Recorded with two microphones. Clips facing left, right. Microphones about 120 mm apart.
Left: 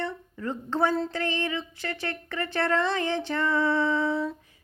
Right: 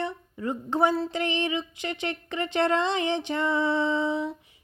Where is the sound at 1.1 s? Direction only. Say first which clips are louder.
Right 2 dB; 20° right (ahead or behind).